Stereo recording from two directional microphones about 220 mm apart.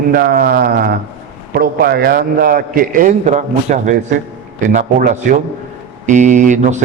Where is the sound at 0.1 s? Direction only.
40° right (ahead or behind).